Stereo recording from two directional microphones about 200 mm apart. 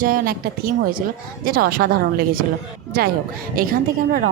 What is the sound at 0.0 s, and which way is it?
A woman's voice, 45° right (ahead or behind).